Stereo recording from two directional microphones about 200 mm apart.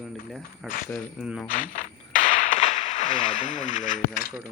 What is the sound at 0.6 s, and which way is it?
Speech, centre (ahead or behind).